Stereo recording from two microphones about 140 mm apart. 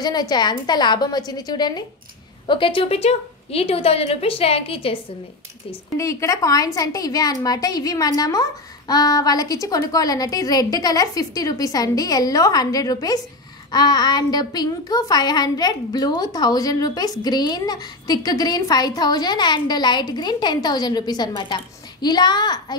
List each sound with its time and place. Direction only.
0.0 s a child's voice: 30° left (ahead or behind)
5.9 s a child's voice: 20° left (ahead or behind)